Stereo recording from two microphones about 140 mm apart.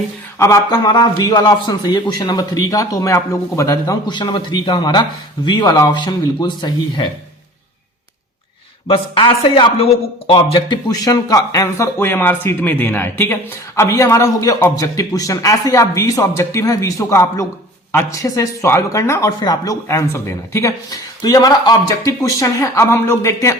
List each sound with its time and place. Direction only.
0.3 s a man's voice: 20° left (ahead or behind)
8.9 s a man's voice: 40° left (ahead or behind); by 23.6 s 20° left (ahead or behind)